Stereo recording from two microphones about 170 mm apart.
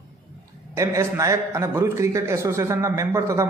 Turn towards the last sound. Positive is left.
turn(degrees=-15)  # may be behind; listen again after turning